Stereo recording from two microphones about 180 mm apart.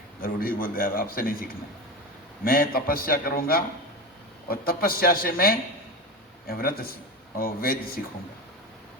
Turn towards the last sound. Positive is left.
turn(degrees=55)  # may be behind; listen again after turning